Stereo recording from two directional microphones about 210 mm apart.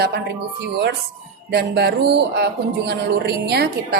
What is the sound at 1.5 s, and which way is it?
A woman's voice, 50° right (ahead or behind).